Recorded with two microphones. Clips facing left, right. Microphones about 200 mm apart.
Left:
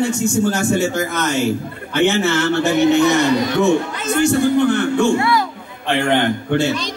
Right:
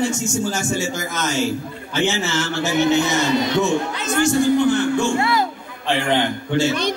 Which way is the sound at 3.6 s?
60° left (ahead or behind).